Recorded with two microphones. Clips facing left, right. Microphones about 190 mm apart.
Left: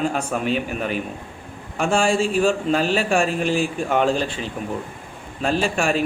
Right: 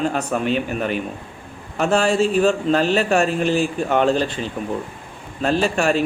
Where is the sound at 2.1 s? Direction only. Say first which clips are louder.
Right 2 dB; 40° right (ahead or behind).